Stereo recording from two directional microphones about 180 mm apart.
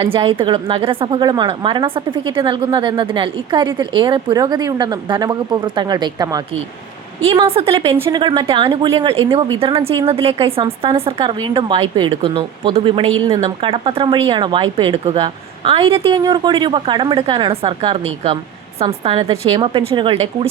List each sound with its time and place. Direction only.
0.0 s a woman's voice: 30° right (ahead or behind)
7.2 s a woman's voice: 30° right (ahead or behind)